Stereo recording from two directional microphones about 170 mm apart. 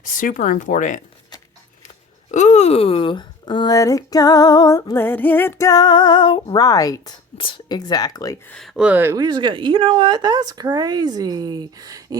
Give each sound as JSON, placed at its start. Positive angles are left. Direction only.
{"t": 0.0, "sound": "speech", "side_deg": 50}
{"t": 2.3, "sound": "speech", "side_deg": 40}
{"t": 8.4, "sound": "a woman's voice", "side_deg": 5}